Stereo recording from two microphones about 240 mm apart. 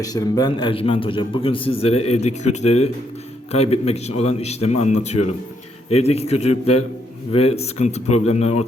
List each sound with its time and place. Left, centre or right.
0.0 s a man's voice: centre
7.3 s a man's voice: left